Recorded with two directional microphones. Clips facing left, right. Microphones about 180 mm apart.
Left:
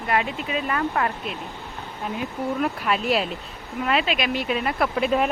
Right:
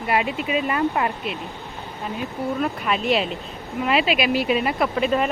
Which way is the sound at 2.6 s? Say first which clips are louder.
Right 1 dB; centre (ahead or behind).